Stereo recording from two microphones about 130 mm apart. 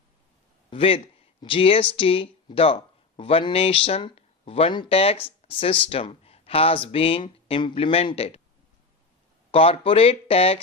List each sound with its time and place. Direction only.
0.7 s speech: 45° left (ahead or behind)
5.4 s a sound: 45° left (ahead or behind)
5.8 s speech: 45° left (ahead or behind)
9.5 s speech: 45° left (ahead or behind)